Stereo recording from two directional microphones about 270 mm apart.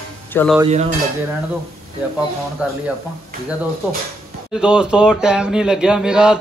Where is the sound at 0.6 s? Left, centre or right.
Right.